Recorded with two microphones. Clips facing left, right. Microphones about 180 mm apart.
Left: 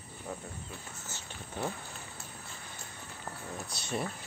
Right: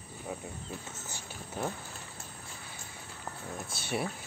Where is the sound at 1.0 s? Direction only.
15° right (ahead or behind).